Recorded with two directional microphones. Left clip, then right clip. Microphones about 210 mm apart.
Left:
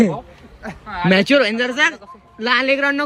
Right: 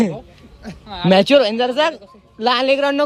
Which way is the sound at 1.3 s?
5° left (ahead or behind).